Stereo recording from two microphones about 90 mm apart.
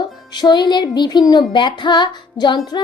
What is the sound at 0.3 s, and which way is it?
A woman's voice, 55° left (ahead or behind).